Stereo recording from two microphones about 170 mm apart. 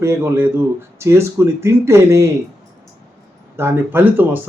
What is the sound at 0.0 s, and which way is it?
Speech, 15° right (ahead or behind).